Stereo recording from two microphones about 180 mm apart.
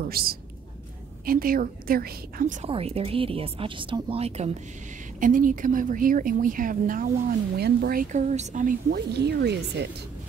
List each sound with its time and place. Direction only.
0.1 s speech: 55° right (ahead or behind)
2.7 s speech: 35° right (ahead or behind)
5.2 s speech: 50° right (ahead or behind)
8.9 s speech: 65° right (ahead or behind)